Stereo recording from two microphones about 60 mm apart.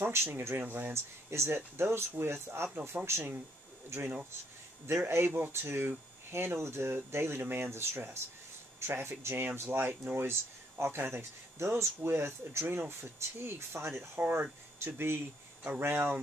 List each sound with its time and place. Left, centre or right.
0.0 s speech: right
0.6 s speech: right
0.9 s speech: right
5.0 s speech: right